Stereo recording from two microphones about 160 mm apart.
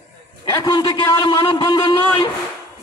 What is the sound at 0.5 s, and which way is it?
A man's voice, 25° left (ahead or behind).